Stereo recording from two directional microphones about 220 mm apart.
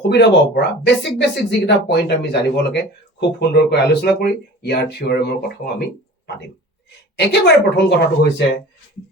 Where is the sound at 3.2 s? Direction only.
50° left (ahead or behind).